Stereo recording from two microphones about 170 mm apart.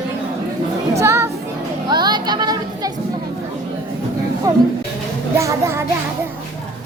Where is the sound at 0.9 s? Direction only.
15° right (ahead or behind).